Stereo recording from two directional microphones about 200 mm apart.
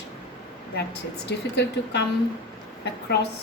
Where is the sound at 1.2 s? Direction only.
60° left (ahead or behind).